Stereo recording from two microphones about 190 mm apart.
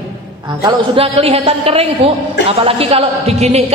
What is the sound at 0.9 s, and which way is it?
A woman's voice, 30° right (ahead or behind).